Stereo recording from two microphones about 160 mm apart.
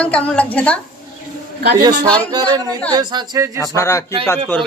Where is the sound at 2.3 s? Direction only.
25° right (ahead or behind).